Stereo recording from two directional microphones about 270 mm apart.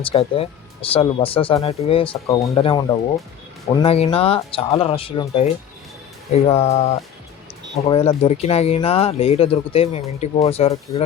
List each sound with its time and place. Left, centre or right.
0.0 s speech: left
3.8 s speech: left